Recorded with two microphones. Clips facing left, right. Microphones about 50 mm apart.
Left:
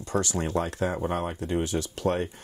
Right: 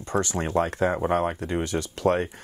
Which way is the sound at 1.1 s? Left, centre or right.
Right.